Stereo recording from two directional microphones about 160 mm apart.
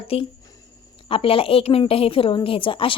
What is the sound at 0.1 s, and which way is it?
A woman's voice, 40° left (ahead or behind).